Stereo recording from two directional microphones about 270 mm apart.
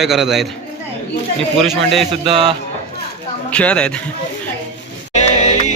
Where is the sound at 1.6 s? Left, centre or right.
Centre.